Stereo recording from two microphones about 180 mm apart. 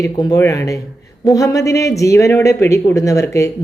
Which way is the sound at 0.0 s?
20° left (ahead or behind).